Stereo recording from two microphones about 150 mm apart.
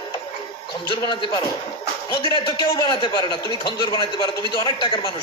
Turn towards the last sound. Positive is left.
turn(degrees=35)  # may be behind; listen again after turning